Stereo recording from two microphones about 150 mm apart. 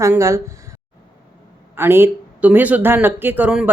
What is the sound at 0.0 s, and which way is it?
Speech, 20° right (ahead or behind).